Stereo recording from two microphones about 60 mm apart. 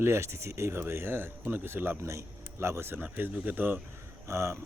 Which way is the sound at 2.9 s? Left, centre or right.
Right.